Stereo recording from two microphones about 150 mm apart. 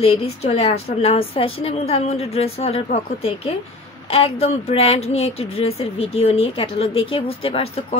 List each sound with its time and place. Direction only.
0.0 s a woman's voice: 40° left (ahead or behind)